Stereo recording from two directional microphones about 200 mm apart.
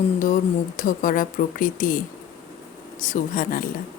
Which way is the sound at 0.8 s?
40° left (ahead or behind).